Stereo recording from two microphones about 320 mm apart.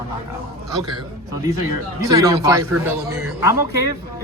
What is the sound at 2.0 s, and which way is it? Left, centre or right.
A man's voice, centre.